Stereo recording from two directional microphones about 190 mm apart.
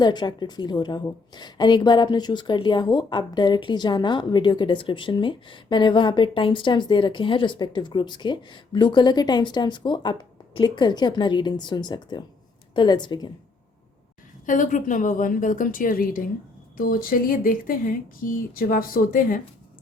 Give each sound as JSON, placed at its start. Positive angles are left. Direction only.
{"t": 0.0, "sound": "a woman's voice", "side_deg": 25}
{"t": 14.4, "sound": "speech", "side_deg": 45}